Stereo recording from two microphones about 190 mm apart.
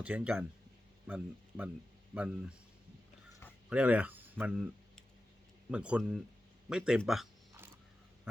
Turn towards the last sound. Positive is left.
turn(degrees=0)  # may be behind; listen again after turning